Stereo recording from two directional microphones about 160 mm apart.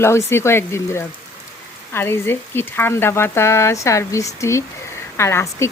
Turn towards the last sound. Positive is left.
turn(degrees=15)  # may be behind; listen again after turning